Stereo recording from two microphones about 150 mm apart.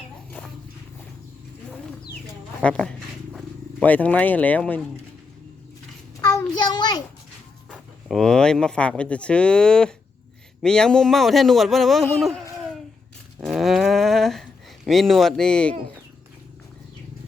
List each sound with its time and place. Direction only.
2.6 s speech: 5° left (ahead or behind)
6.2 s a child's voice: 25° left (ahead or behind)
7.7 s speech: centre (ahead or behind)
13.4 s a sound: centre (ahead or behind)
14.8 s speech: centre (ahead or behind)